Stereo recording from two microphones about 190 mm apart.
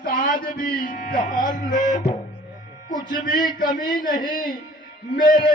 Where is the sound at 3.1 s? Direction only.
45° left (ahead or behind).